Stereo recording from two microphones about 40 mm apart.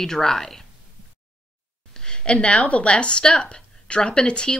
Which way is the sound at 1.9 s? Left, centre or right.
Centre.